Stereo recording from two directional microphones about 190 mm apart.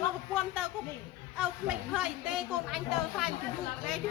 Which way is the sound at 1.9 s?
5° right (ahead or behind).